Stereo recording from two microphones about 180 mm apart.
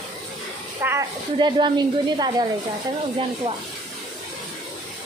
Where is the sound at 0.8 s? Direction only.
10° right (ahead or behind).